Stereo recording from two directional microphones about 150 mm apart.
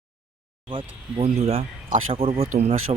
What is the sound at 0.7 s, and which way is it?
Speech, 35° right (ahead or behind).